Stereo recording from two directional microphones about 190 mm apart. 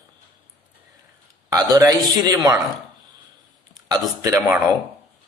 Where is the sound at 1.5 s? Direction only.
20° right (ahead or behind).